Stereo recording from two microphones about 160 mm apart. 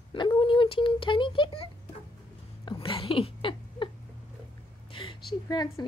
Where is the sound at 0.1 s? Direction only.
30° left (ahead or behind).